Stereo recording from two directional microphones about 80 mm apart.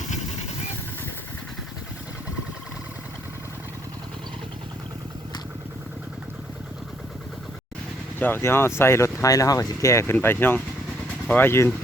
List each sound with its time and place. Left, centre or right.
8.2 s speech: left
10.2 s speech: left